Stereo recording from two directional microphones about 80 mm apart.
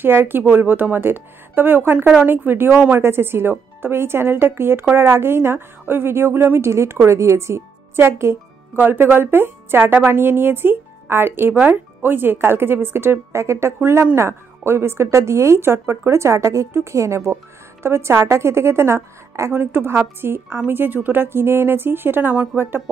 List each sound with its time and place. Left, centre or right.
0.0 s a woman's voice: right
8.7 s a woman's voice: right